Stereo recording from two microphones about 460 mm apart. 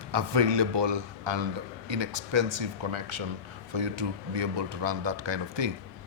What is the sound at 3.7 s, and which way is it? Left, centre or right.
A man's voice, right.